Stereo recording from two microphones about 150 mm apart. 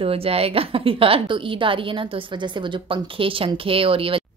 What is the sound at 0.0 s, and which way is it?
A woman's voice, 40° right (ahead or behind).